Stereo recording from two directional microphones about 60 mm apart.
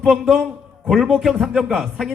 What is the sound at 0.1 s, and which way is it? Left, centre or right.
A man's voice, centre.